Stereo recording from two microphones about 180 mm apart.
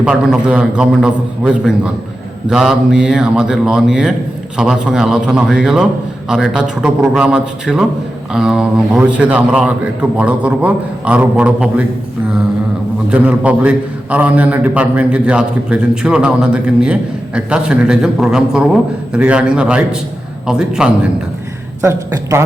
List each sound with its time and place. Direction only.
0.0 s a man's voice: 5° right (ahead or behind)
13.1 s a man's voice: 5° right (ahead or behind)
21.8 s speech: 15° right (ahead or behind)